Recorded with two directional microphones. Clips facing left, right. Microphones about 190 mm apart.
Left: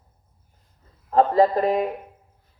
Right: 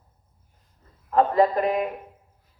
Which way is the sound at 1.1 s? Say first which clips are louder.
Left 2 dB; 30° left (ahead or behind).